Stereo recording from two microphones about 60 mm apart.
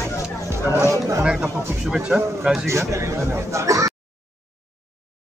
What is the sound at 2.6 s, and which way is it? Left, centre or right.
Speech, right.